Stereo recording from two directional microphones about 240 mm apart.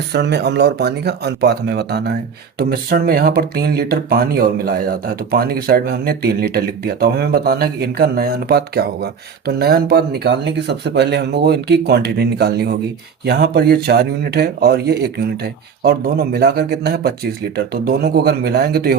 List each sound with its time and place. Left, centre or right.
0.1 s speech: right